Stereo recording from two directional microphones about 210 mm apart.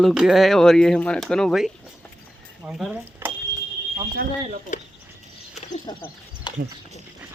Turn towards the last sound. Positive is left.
turn(degrees=20)  # may be behind; listen again after turning